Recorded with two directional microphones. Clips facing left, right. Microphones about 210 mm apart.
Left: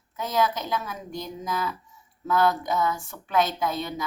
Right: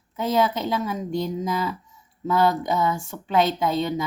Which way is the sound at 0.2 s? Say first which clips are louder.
Right 4 dB; 25° right (ahead or behind).